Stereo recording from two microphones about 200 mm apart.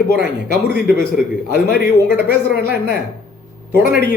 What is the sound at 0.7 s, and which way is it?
A man's voice, 50° left (ahead or behind).